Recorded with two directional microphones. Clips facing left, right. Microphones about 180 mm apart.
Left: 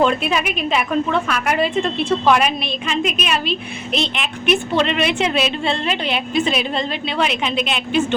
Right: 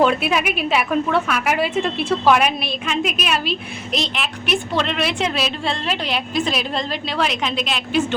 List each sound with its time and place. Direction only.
0.0 s a woman's voice: 5° right (ahead or behind)